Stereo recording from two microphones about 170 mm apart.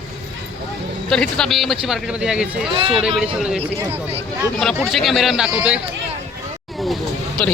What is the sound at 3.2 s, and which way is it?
Speech, 5° right (ahead or behind).